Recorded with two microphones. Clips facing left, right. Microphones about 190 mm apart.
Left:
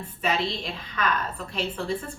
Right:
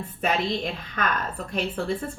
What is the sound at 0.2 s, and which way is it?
Speech, 50° right (ahead or behind).